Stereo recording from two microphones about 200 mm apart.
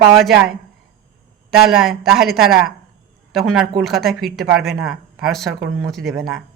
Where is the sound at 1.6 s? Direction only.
Centre (ahead or behind).